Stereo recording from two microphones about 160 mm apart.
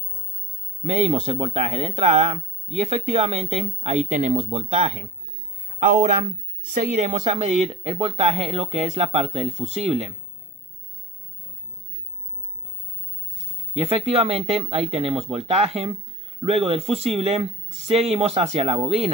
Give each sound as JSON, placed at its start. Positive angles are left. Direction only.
{"t": 0.8, "sound": "speech", "side_deg": -45}
{"t": 13.7, "sound": "speech", "side_deg": -40}